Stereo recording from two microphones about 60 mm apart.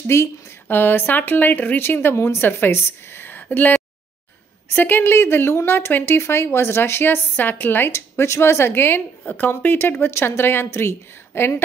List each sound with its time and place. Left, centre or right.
0.0 s a woman's voice: left
9.2 s a woman's voice: left
9.5 s speech: left